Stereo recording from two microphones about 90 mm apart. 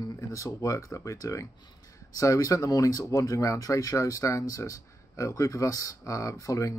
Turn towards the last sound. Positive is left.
turn(degrees=40)  # may be behind; listen again after turning